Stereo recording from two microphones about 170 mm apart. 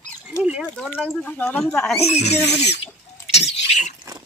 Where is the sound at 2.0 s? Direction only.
40° left (ahead or behind).